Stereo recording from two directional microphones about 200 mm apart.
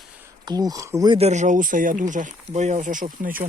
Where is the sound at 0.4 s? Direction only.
20° right (ahead or behind).